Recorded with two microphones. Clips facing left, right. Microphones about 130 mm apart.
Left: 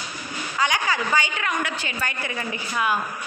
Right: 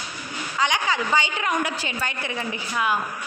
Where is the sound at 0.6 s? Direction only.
5° left (ahead or behind).